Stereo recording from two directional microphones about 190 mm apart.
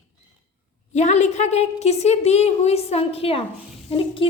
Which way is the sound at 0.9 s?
35° left (ahead or behind).